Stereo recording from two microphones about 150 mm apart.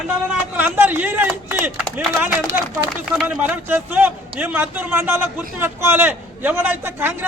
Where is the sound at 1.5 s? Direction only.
15° right (ahead or behind).